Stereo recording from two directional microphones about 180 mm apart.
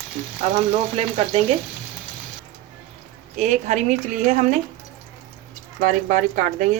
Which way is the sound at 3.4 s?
40° right (ahead or behind).